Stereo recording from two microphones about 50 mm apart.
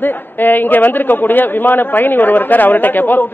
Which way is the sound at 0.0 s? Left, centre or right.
Left.